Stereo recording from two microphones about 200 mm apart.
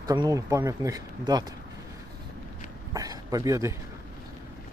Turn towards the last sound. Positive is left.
turn(degrees=-15)  # may be behind; listen again after turning